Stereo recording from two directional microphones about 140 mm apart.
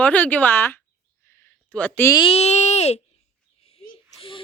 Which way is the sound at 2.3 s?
50° left (ahead or behind).